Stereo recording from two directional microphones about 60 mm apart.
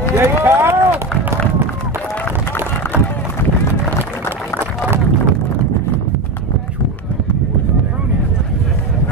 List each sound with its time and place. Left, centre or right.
0.1 s run: right